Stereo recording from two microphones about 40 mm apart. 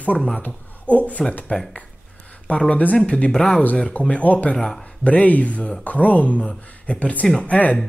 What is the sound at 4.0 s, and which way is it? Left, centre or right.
Speech, left.